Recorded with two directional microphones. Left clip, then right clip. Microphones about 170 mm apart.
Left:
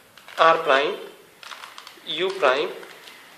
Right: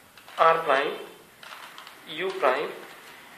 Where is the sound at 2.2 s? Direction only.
65° left (ahead or behind).